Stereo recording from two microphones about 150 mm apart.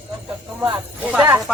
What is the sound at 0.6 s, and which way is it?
Speech, 10° right (ahead or behind).